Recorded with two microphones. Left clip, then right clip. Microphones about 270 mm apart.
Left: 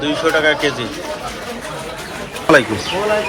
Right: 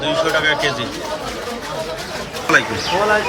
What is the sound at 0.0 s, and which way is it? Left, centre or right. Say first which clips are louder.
Speech: left 2 dB; centre.